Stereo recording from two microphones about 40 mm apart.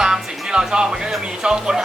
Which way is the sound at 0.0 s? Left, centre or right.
Centre.